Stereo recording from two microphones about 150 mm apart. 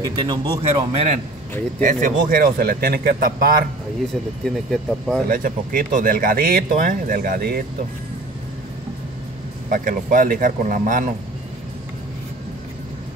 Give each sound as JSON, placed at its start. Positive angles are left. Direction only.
{"t": 0.0, "sound": "speech", "side_deg": -30}
{"t": 0.9, "sound": "a man's voice", "side_deg": -50}
{"t": 1.8, "sound": "speech", "side_deg": -60}
{"t": 4.5, "sound": "speech", "side_deg": 5}
{"t": 5.3, "sound": "speech", "side_deg": -70}
{"t": 9.7, "sound": "speech", "side_deg": -65}